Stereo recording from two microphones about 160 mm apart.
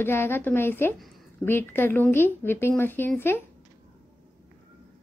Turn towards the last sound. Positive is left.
turn(degrees=15)  # may be behind; listen again after turning